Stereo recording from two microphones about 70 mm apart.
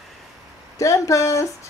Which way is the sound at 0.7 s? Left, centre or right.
Left.